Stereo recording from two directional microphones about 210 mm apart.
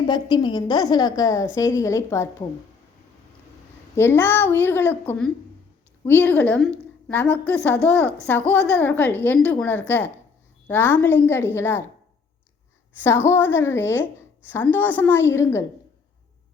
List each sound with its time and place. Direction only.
0.1 s a woman's voice: 20° left (ahead or behind)
3.9 s a woman's voice: 10° left (ahead or behind)
13.0 s a woman's voice: 10° left (ahead or behind)